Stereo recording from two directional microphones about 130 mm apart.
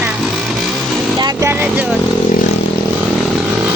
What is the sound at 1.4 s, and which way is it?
Speech, 15° right (ahead or behind).